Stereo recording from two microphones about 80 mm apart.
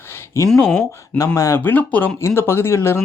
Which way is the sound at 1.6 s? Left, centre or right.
Left.